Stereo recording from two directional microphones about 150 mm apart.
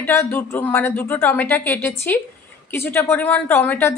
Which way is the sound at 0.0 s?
15° left (ahead or behind).